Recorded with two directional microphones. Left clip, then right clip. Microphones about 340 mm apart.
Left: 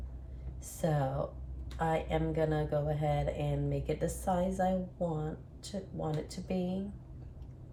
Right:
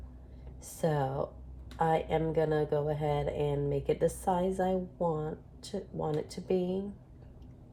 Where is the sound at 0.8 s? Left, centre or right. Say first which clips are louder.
Right 2 dB; right.